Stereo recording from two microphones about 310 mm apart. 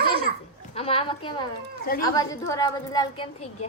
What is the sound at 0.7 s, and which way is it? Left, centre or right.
A woman's voice, centre.